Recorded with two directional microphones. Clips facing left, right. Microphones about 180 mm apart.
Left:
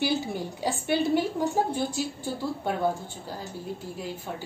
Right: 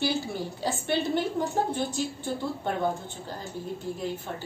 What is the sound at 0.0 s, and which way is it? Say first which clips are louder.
A woman's voice: left 1 dB; 15° left (ahead or behind).